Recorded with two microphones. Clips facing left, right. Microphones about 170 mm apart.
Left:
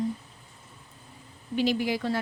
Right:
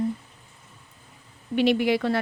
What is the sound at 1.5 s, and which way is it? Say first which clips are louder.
Speech: right 5 dB; 70° right (ahead or behind).